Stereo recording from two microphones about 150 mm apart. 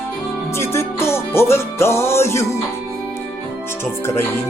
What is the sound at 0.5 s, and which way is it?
Music, 20° left (ahead or behind).